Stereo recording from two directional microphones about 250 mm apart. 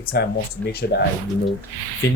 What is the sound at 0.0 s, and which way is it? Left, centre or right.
Speech, left.